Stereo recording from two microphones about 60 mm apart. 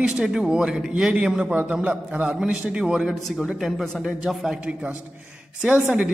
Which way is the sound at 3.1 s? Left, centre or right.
Centre.